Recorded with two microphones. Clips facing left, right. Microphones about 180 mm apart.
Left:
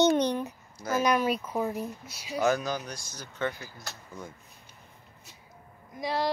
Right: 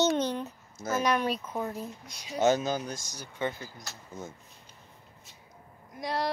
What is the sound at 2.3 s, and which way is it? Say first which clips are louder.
Speech: right 1 dB; 25° right (ahead or behind).